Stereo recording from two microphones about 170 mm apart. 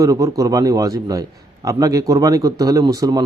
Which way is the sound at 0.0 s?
20° right (ahead or behind).